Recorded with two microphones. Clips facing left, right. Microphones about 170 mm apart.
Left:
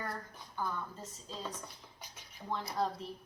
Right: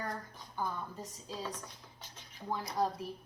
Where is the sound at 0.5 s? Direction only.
15° right (ahead or behind).